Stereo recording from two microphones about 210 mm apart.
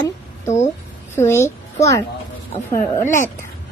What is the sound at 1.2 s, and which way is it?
Speech, 15° left (ahead or behind).